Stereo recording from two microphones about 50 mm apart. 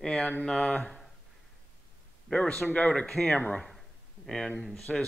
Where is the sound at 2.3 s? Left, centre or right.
Centre.